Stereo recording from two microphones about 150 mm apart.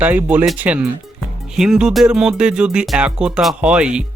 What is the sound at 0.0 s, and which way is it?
Speech, 10° right (ahead or behind).